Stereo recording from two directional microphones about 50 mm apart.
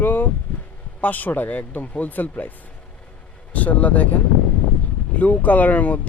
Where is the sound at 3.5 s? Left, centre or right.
Left.